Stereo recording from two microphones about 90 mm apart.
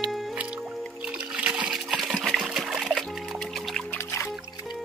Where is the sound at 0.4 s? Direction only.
15° right (ahead or behind).